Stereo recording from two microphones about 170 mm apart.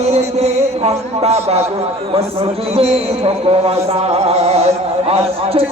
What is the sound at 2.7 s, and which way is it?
Music, 35° right (ahead or behind).